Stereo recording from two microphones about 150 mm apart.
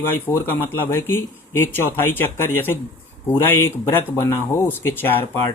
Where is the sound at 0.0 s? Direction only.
15° left (ahead or behind).